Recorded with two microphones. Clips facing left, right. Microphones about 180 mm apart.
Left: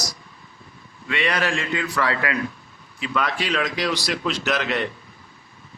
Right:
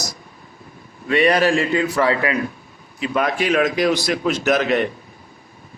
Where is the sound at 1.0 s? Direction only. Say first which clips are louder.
Right 8 dB; 40° right (ahead or behind).